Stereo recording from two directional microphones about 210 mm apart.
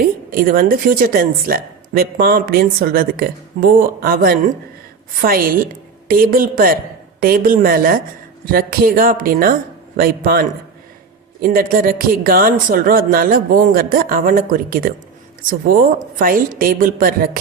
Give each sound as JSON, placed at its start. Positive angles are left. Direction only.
{"t": 0.3, "sound": "a woman's voice", "side_deg": -45}